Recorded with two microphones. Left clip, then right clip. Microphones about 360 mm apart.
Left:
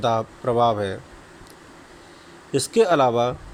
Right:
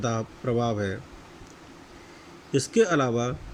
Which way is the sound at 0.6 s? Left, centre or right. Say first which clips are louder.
Left 12 dB; centre.